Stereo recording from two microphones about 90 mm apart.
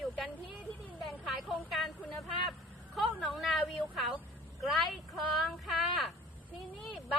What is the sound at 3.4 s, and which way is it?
A woman's voice, centre (ahead or behind).